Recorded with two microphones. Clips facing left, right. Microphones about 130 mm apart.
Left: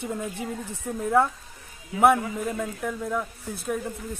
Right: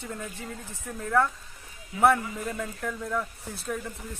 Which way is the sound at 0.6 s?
65° left (ahead or behind).